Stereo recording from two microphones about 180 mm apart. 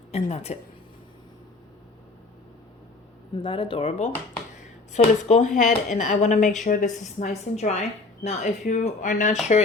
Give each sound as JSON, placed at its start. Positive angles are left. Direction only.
{"t": 0.1, "sound": "a woman's voice", "side_deg": 35}
{"t": 3.3, "sound": "a woman's voice", "side_deg": 25}